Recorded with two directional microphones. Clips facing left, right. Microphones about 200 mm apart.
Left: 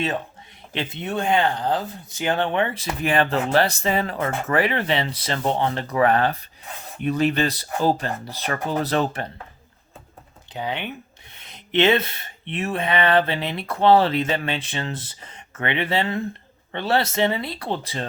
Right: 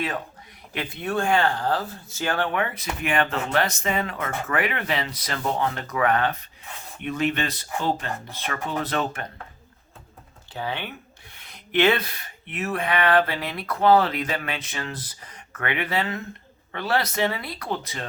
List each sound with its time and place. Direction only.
0.7 s speech: 25° left (ahead or behind)
10.5 s speech: 20° left (ahead or behind)